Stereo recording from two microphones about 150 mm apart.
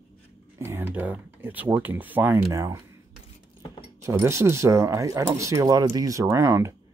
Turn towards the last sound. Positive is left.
turn(degrees=-20)  # may be behind; listen again after turning